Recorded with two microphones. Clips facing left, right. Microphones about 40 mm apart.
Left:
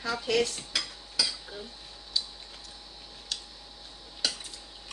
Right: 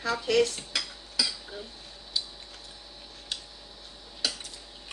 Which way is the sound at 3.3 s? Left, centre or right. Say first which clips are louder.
Right 1 dB; centre.